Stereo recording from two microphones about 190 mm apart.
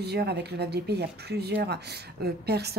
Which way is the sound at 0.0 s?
60° right (ahead or behind).